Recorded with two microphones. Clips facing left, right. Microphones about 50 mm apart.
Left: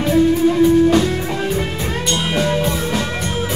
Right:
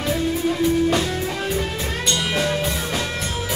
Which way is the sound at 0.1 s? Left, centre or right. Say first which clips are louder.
Left 9 dB; centre.